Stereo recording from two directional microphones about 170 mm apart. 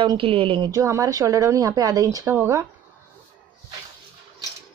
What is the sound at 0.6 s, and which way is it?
Speech, 20° right (ahead or behind).